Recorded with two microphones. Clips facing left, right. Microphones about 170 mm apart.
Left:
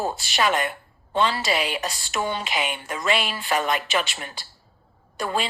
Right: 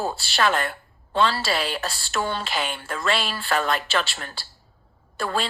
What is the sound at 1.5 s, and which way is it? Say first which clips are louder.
A woman's voice: left 1 dB; 15° left (ahead or behind).